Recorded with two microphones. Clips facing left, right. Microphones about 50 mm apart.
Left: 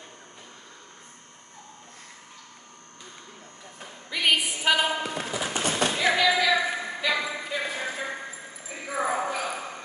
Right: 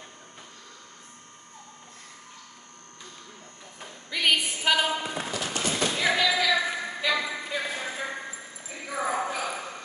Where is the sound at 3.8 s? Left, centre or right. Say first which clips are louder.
Even; centre.